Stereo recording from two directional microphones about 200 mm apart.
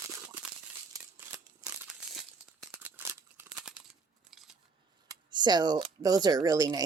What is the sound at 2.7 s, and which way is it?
Scissors, 10° right (ahead or behind).